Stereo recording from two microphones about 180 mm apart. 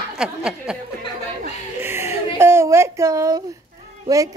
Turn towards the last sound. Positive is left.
turn(degrees=-20)  # may be behind; listen again after turning